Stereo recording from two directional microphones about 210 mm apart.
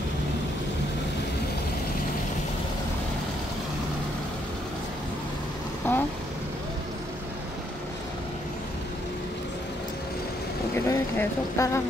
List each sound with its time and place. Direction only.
5.9 s vehicle: 10° left (ahead or behind)
10.9 s speech: 15° left (ahead or behind)